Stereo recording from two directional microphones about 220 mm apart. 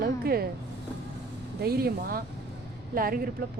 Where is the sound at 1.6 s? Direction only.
45° right (ahead or behind).